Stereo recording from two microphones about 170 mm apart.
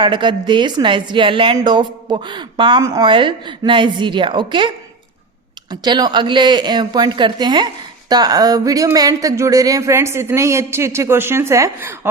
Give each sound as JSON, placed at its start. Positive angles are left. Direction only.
{"t": 0.0, "sound": "a woman's voice", "side_deg": -25}
{"t": 5.8, "sound": "a woman's voice", "side_deg": -25}